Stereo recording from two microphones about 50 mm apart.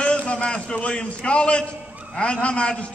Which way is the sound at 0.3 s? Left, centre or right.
Left.